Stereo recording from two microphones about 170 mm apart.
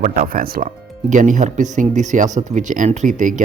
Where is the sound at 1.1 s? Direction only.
45° right (ahead or behind).